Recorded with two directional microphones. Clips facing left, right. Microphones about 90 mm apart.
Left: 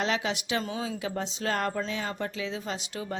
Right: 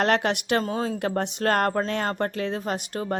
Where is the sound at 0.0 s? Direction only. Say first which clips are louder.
Right 7 dB; 60° right (ahead or behind).